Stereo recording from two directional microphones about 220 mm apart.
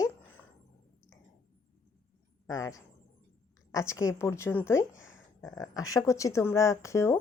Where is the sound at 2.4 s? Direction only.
15° left (ahead or behind).